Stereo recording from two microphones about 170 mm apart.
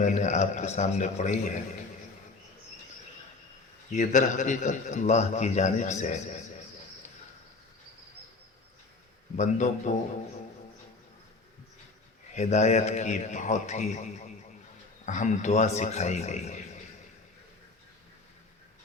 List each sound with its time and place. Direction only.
0.0 s a man's voice: 45° left (ahead or behind)
3.9 s a man's voice: 45° left (ahead or behind)
9.3 s a man's voice: 45° left (ahead or behind)
12.3 s a man's voice: 40° left (ahead or behind)
15.0 s a man's voice: 45° left (ahead or behind)